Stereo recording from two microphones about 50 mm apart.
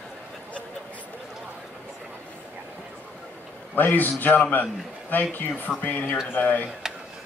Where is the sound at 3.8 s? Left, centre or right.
Left.